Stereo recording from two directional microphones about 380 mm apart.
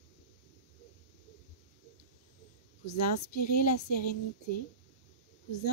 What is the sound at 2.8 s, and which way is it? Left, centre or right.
A woman's voice, left.